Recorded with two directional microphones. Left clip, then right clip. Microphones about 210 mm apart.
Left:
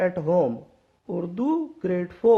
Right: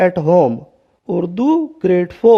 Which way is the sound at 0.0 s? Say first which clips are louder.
Right 10 dB; 40° right (ahead or behind).